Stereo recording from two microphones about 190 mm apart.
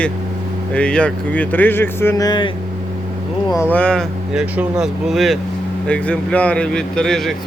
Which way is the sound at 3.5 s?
10° left (ahead or behind).